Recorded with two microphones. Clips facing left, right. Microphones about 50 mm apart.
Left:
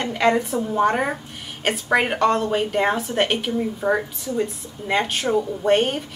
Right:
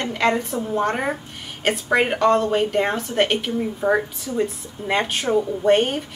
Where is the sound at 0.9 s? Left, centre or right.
Centre.